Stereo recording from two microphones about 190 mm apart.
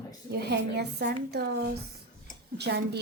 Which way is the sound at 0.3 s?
60° right (ahead or behind).